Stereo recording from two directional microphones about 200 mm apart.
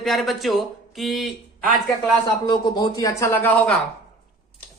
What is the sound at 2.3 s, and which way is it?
Speech, 20° left (ahead or behind).